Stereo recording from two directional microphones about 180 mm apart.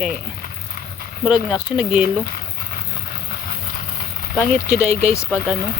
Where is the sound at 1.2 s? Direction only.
5° right (ahead or behind).